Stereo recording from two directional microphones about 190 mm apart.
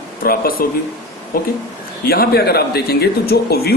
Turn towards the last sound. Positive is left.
turn(degrees=55)  # may be behind; listen again after turning